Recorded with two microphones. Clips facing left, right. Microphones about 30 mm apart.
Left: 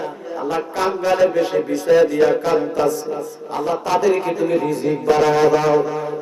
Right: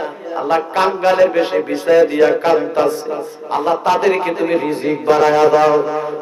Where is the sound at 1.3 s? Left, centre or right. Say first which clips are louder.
Right 2 dB; right.